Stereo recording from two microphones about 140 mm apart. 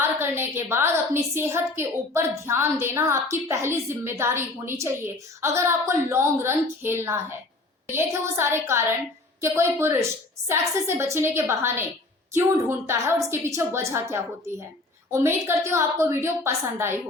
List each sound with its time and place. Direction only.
0.0 s a woman's voice: 15° right (ahead or behind)